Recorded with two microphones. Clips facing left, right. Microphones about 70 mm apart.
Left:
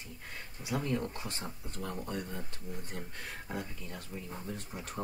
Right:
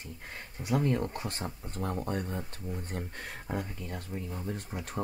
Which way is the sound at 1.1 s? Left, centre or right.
Right.